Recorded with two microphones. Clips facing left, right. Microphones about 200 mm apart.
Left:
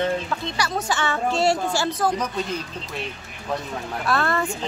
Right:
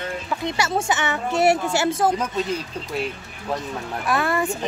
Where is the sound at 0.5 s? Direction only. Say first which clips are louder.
Right 2 dB; 25° right (ahead or behind).